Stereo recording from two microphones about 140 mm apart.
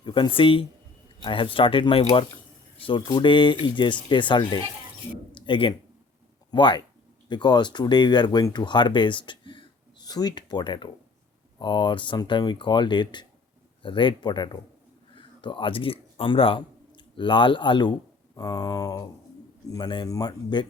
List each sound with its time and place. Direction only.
0.0 s speech: 35° left (ahead or behind)
5.3 s a sound: 35° left (ahead or behind)
6.5 s speech: 35° left (ahead or behind)